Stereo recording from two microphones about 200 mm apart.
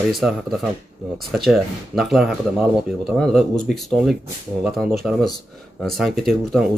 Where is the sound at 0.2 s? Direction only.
Centre (ahead or behind).